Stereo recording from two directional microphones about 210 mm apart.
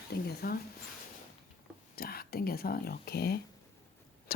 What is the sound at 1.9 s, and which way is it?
Speech, 45° left (ahead or behind).